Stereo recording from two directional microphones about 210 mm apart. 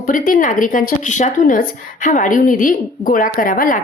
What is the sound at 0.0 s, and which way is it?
A woman's voice, 40° left (ahead or behind).